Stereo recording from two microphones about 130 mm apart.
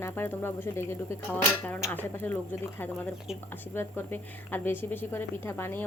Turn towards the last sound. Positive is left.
turn(degrees=15)  # may be behind; listen again after turning